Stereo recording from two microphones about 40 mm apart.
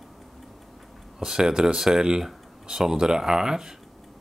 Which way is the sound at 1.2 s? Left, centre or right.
Centre.